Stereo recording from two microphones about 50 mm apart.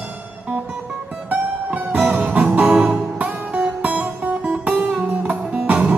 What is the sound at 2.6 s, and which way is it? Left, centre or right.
Music, centre.